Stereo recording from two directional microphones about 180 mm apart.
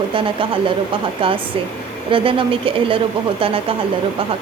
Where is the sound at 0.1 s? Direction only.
30° right (ahead or behind).